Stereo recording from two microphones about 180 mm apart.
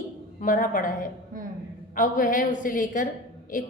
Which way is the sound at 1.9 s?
50° left (ahead or behind).